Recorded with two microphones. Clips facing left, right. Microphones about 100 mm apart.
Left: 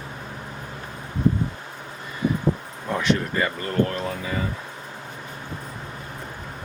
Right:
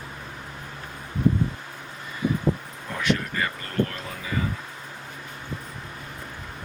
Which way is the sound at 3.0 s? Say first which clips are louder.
Left 2 dB; 25° left (ahead or behind).